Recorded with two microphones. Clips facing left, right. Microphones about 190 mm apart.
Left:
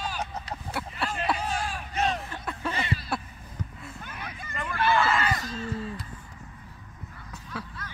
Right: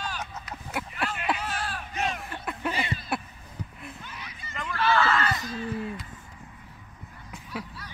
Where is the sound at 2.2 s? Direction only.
10° right (ahead or behind).